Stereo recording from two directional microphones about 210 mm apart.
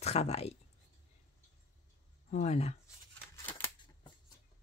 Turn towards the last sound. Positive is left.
turn(degrees=10)  # may be behind; listen again after turning